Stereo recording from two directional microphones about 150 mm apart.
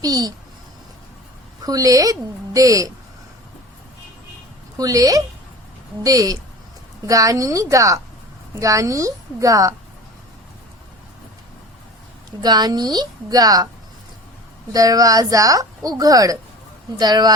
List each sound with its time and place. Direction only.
0.0 s a woman's voice: 25° right (ahead or behind)
1.6 s a woman's voice: 25° right (ahead or behind)
4.8 s a woman's voice: 25° right (ahead or behind)
12.4 s a woman's voice: 25° right (ahead or behind)
14.7 s a woman's voice: 25° right (ahead or behind)